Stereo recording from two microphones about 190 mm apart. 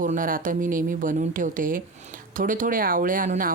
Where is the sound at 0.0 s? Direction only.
45° right (ahead or behind).